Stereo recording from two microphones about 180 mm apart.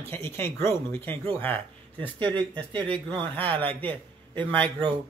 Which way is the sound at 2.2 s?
10° left (ahead or behind).